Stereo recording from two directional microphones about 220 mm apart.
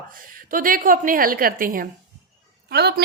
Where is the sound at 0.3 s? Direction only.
40° right (ahead or behind).